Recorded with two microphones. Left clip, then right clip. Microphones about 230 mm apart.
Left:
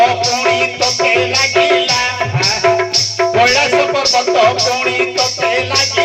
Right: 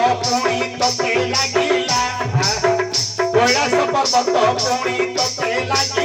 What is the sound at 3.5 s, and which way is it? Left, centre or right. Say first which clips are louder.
Music: left 4 dB; right.